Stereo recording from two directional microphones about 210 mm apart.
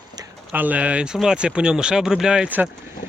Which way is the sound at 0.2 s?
10° right (ahead or behind).